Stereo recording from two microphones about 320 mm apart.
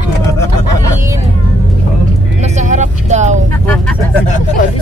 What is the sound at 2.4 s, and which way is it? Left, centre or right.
Vehicle, right.